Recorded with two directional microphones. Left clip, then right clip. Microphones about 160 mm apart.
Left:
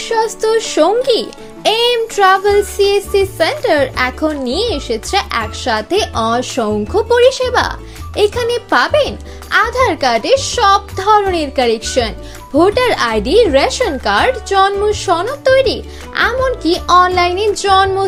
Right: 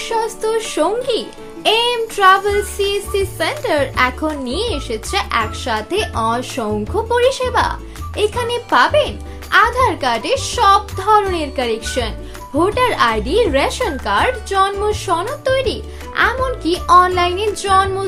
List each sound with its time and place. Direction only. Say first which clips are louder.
0.0 s speech: left 4 dB; 25° left (ahead or behind)
16.8 s music: left 1 dB; 30° left (ahead or behind)